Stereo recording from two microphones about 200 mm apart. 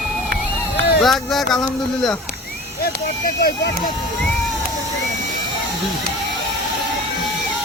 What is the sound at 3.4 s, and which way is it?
Speech, 50° left (ahead or behind).